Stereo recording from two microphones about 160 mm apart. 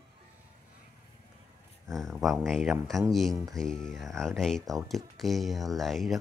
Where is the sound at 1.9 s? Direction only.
Centre (ahead or behind).